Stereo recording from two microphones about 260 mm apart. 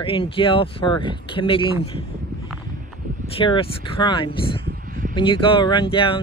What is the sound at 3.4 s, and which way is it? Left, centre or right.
Speech, centre.